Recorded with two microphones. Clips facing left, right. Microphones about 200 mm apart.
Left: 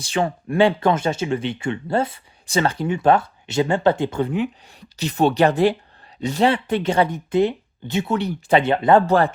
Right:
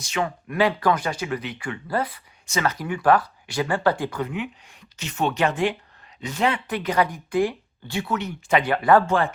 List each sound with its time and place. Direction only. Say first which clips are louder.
0.0 s speech: left 4 dB; 30° left (ahead or behind)
4.3 s speech: left 7 dB; 35° left (ahead or behind)
9.0 s speech: left 5 dB; 35° left (ahead or behind)